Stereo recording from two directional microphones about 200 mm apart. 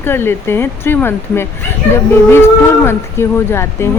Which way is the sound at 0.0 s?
10° left (ahead or behind).